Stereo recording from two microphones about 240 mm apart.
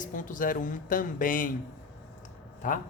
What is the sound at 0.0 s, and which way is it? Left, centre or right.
Speech, left.